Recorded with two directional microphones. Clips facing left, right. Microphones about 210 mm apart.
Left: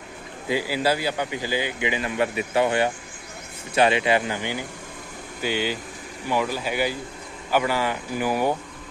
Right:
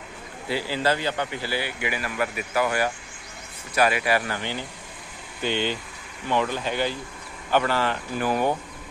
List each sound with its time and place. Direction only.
0.5 s speech: 15° left (ahead or behind)